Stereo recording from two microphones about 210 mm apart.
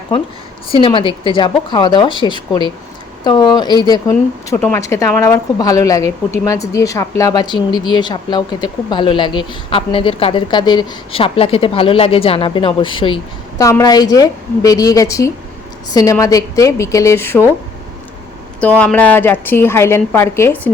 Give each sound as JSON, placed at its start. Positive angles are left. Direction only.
{"t": 0.8, "sound": "a woman's voice", "side_deg": 25}
{"t": 18.6, "sound": "a woman's voice", "side_deg": 5}